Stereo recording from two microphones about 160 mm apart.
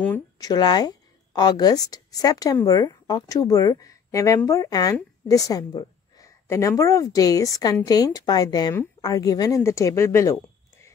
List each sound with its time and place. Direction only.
0.4 s speech: 25° left (ahead or behind)
5.3 s a sound: 20° left (ahead or behind)
6.8 s a woman's voice: 20° left (ahead or behind)